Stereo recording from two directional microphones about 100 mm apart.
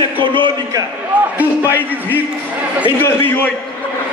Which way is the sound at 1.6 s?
20° left (ahead or behind).